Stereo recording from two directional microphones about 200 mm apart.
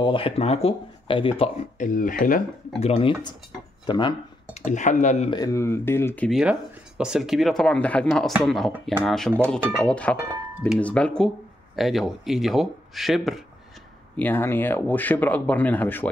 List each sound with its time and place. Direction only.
0.0 s speech: 25° left (ahead or behind)
1.4 s speech: 40° left (ahead or behind)
2.9 s speech: 25° left (ahead or behind)
4.6 s speech: 35° left (ahead or behind)
5.3 s speech: 15° left (ahead or behind)